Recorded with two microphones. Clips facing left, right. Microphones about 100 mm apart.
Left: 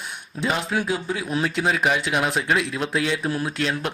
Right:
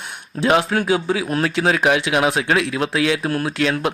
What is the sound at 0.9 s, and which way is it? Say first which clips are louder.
Speech: right 7 dB; 90° right.